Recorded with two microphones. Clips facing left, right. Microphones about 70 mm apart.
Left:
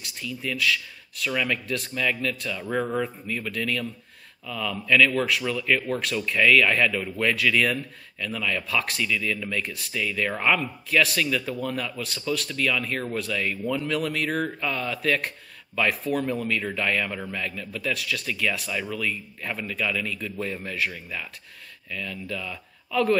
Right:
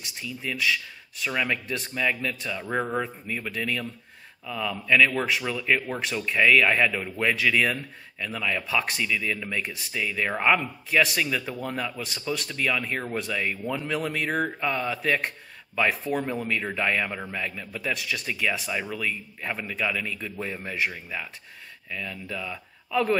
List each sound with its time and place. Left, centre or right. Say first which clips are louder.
0.2 s speech: left 2 dB; centre
16.1 s speech: left 2 dB; centre